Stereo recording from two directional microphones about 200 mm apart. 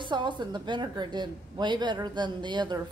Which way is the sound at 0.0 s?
20° right (ahead or behind).